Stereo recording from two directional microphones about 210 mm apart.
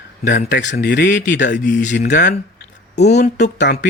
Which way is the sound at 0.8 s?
50° left (ahead or behind).